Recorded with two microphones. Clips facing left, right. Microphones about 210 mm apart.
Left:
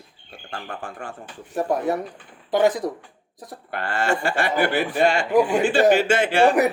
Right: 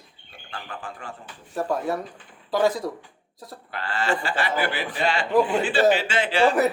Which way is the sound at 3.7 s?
50° left (ahead or behind).